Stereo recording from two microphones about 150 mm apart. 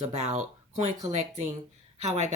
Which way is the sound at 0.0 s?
50° right (ahead or behind).